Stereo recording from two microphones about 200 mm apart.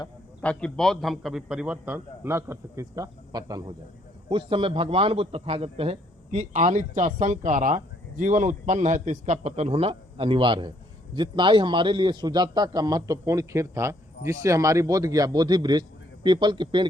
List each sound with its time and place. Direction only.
0.4 s a man's voice: 5° left (ahead or behind); by 16.8 s 20° right (ahead or behind)